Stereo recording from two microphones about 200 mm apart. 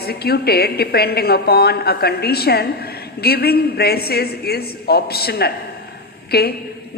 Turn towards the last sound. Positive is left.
turn(degrees=50)  # may be behind; listen again after turning